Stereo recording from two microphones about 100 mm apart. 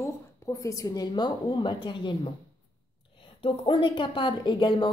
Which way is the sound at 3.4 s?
60° left (ahead or behind).